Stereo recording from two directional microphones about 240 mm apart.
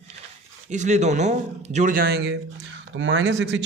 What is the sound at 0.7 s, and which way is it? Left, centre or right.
A man's voice, right.